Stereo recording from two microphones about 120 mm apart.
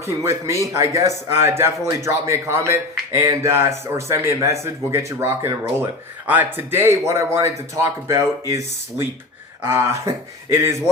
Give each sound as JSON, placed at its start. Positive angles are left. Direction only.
{"t": 0.0, "sound": "speech", "side_deg": -25}